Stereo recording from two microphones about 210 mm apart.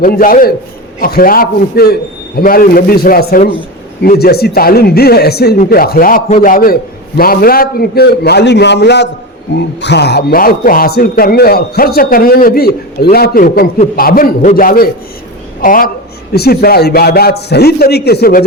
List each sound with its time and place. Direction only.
0.0 s a man's voice: 40° left (ahead or behind)